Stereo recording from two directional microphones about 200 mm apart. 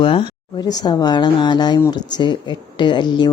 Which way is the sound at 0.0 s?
25° left (ahead or behind).